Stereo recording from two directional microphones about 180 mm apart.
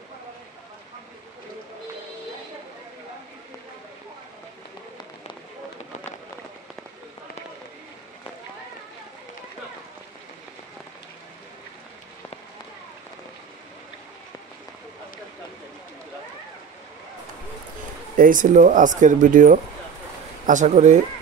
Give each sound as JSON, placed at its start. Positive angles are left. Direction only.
{"t": 18.1, "sound": "speech", "side_deg": -50}